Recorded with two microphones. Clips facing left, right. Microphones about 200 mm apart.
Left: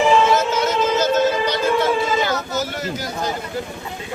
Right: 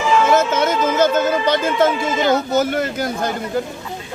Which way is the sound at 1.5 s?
50° right (ahead or behind).